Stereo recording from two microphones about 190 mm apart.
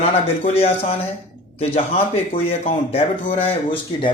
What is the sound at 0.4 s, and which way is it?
Speech, 30° left (ahead or behind).